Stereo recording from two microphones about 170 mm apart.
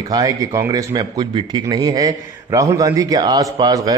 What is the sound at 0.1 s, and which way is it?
A man's voice, 20° right (ahead or behind).